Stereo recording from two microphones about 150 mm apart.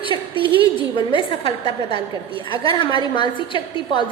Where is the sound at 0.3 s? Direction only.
35° right (ahead or behind).